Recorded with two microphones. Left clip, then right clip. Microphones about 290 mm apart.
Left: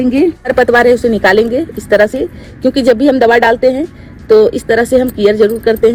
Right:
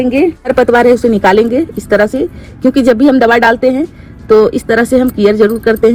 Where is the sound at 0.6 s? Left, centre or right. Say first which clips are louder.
Even; right.